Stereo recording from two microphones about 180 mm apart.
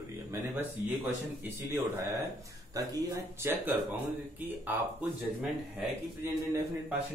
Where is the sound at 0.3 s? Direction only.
10° right (ahead or behind).